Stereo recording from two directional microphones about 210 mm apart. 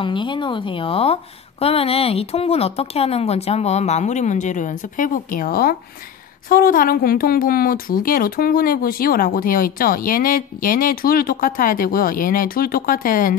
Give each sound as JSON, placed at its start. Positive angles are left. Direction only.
{"t": 0.0, "sound": "a woman's voice", "side_deg": 25}